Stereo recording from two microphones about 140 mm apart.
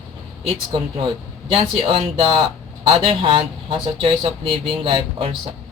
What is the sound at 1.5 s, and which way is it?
Speech, 40° right (ahead or behind).